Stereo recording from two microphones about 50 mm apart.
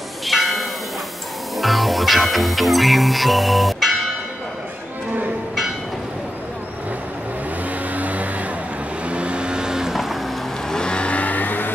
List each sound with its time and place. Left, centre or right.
0.3 s church bell: centre
1.6 s music: centre
7.9 s hair dryer: right
9.0 s vehicle: right
10.7 s vehicle: centre; by 11.7 s left